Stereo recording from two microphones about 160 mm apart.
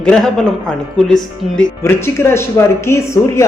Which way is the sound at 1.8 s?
15° left (ahead or behind).